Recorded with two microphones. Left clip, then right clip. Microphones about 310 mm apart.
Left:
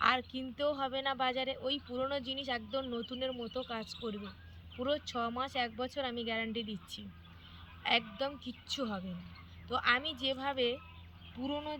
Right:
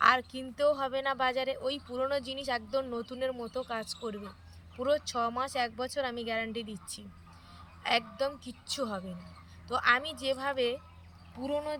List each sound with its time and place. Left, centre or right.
0.0 s speech: centre